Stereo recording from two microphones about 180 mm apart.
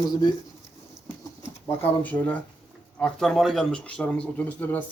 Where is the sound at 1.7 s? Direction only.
10° left (ahead or behind).